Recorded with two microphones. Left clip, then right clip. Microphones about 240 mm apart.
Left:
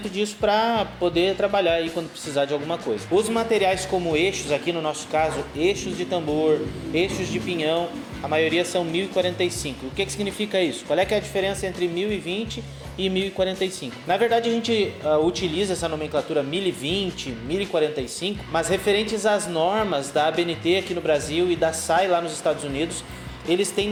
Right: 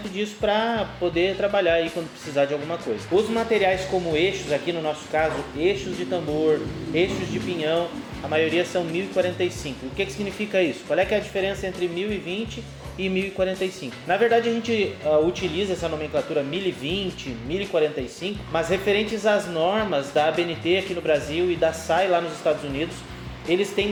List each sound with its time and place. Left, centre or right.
0.2 s speech: left